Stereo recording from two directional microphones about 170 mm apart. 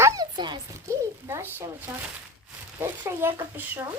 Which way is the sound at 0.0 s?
20° right (ahead or behind).